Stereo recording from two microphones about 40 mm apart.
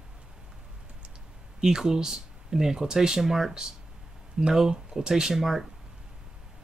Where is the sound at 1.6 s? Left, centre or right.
Centre.